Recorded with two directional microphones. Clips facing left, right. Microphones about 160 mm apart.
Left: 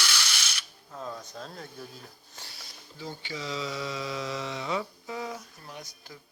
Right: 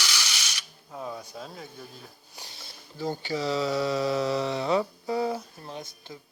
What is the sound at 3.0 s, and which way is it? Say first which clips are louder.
Speech: right 8 dB; 40° right (ahead or behind).